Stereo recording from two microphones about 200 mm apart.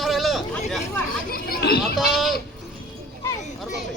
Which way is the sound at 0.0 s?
Centre (ahead or behind).